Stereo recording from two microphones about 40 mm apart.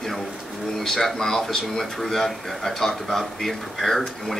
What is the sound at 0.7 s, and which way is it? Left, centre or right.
Speech, centre.